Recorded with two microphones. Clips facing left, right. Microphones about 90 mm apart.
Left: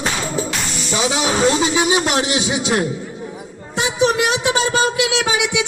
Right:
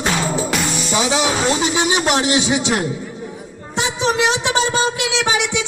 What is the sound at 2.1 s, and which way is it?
Speech, 30° right (ahead or behind).